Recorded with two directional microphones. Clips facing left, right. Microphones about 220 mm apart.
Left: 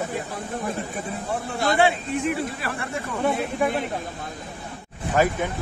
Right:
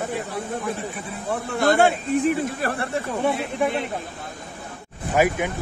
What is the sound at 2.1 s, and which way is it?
Speech, 40° right (ahead or behind).